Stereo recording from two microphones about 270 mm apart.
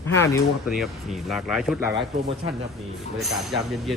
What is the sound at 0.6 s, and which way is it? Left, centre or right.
Speech, centre.